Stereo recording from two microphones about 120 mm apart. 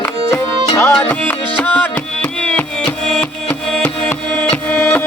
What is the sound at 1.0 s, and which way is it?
Music, 15° left (ahead or behind).